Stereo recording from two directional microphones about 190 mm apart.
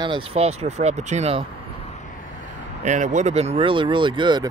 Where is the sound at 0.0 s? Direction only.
25° right (ahead or behind).